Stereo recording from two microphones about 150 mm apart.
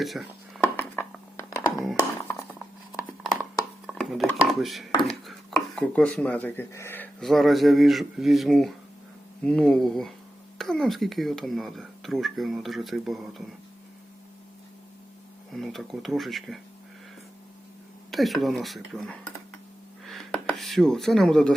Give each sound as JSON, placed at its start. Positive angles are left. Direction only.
{"t": 0.0, "sound": "speech", "side_deg": 0}
{"t": 0.6, "sound": "a sound", "side_deg": 15}
{"t": 3.8, "sound": "dishes", "side_deg": 0}
{"t": 4.4, "sound": "speech", "side_deg": 0}
{"t": 7.2, "sound": "speech", "side_deg": 0}
{"t": 15.5, "sound": "speech", "side_deg": 0}
{"t": 18.1, "sound": "speech", "side_deg": 0}
{"t": 20.1, "sound": "a sound", "side_deg": 0}